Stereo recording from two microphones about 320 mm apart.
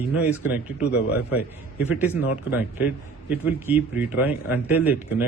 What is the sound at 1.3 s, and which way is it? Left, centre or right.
A man's voice, centre.